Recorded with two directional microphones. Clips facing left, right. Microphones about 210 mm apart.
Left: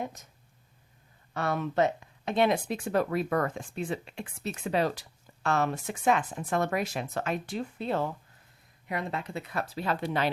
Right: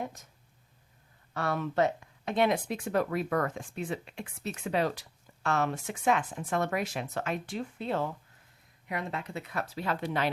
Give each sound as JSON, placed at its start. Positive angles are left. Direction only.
{"t": 0.0, "sound": "speech", "side_deg": 20}
{"t": 1.3, "sound": "speech", "side_deg": 20}